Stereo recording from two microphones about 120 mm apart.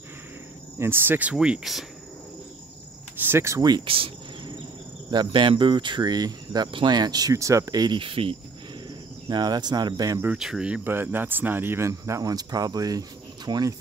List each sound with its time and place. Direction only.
0.7 s speech: 20° right (ahead or behind); by 1.9 s centre (ahead or behind)
3.2 s speech: 20° right (ahead or behind)
3.8 s speech: 50° right (ahead or behind)
5.1 s speech: 40° right (ahead or behind)
9.3 s speech: 35° right (ahead or behind)
10.2 s speech: 5° right (ahead or behind); by 13.7 s 30° right (ahead or behind)